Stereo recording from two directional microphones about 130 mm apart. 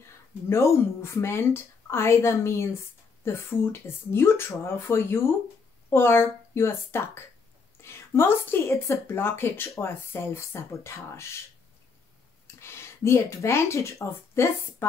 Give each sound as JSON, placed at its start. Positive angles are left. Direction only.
{"t": 0.5, "sound": "a woman's voice", "side_deg": 20}
{"t": 12.5, "sound": "speech", "side_deg": 20}